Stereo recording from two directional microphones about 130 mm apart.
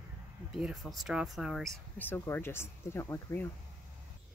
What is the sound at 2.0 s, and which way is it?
Speech, 15° left (ahead or behind).